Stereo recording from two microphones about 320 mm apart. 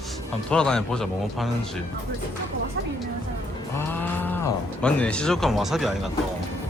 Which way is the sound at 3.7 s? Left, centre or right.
Centre.